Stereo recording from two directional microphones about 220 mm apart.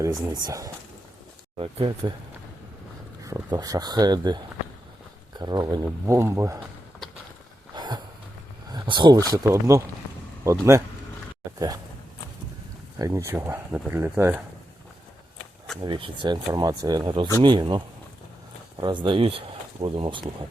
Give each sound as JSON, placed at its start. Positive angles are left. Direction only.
{"t": 0.3, "sound": "speech", "side_deg": -15}
{"t": 3.2, "sound": "speech", "side_deg": -15}
{"t": 5.4, "sound": "speech", "side_deg": -20}
{"t": 7.8, "sound": "a sound", "side_deg": -20}
{"t": 8.7, "sound": "speech", "side_deg": -20}
{"t": 13.0, "sound": "speech", "side_deg": -15}
{"t": 15.8, "sound": "speech", "side_deg": -25}